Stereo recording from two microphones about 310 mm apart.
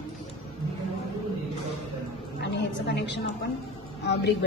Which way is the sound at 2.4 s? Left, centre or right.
Left.